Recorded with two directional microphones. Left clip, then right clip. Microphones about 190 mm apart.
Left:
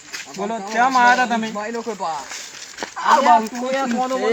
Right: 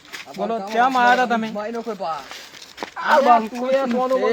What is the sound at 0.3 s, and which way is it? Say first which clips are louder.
Speech: even; 20° right (ahead or behind).